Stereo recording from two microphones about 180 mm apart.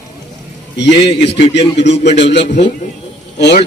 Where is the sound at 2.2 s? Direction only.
75° left (ahead or behind).